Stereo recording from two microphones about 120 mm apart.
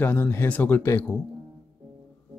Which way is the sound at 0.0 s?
15° left (ahead or behind).